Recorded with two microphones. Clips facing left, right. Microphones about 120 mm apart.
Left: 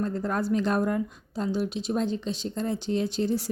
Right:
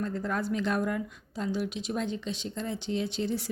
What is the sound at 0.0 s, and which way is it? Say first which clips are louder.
A woman's voice: left 3 dB; 40° left (ahead or behind).